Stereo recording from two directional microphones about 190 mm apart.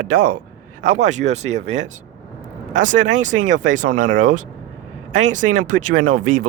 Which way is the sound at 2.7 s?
40° right (ahead or behind).